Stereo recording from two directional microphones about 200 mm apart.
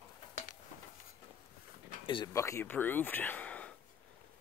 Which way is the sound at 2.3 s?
15° left (ahead or behind).